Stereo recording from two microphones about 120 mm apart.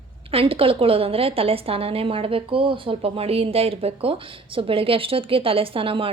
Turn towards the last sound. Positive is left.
turn(degrees=-50)  # may be behind; listen again after turning